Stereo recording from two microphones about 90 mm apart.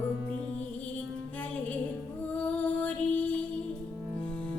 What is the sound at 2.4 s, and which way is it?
Music, 15° left (ahead or behind).